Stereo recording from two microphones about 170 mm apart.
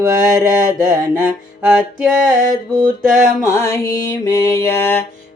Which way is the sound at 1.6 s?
5° right (ahead or behind).